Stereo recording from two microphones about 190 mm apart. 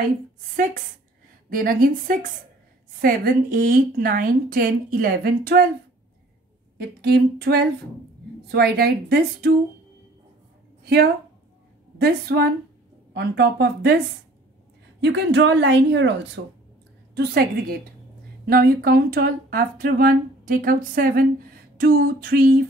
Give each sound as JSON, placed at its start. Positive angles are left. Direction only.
{"t": 1.5, "sound": "speech", "side_deg": -45}
{"t": 7.0, "sound": "a woman's voice", "side_deg": -60}
{"t": 12.0, "sound": "a woman's voice", "side_deg": -55}
{"t": 16.4, "sound": "speech", "side_deg": -80}
{"t": 17.1, "sound": "a woman's voice", "side_deg": -55}